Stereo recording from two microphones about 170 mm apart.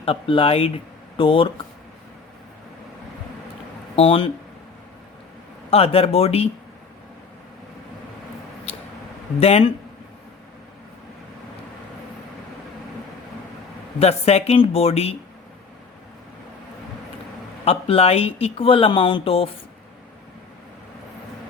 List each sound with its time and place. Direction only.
0.0 s speech: 30° left (ahead or behind)
3.9 s speech: 35° left (ahead or behind)
5.7 s speech: 35° left (ahead or behind)
8.7 s mouse: 35° left (ahead or behind)
9.4 s speech: 35° left (ahead or behind)
14.0 s speech: 40° left (ahead or behind)
17.7 s speech: 35° left (ahead or behind)